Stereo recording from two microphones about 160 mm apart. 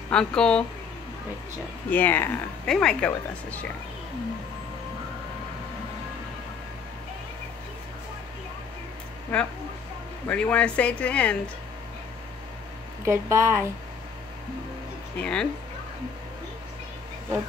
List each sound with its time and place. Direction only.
0.1 s speech: 5° left (ahead or behind)
1.9 s speech: 10° left (ahead or behind)
9.3 s speech: 5° left (ahead or behind)
13.0 s speech: 15° right (ahead or behind)
15.1 s speech: 5° left (ahead or behind)